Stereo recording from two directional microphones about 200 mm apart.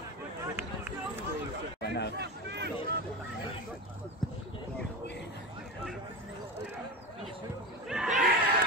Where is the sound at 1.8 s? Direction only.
55° left (ahead or behind).